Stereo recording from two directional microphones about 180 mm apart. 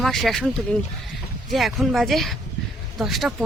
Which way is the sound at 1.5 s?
Centre (ahead or behind).